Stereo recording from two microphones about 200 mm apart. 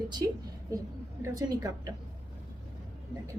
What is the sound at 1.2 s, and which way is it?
Speech, 15° right (ahead or behind).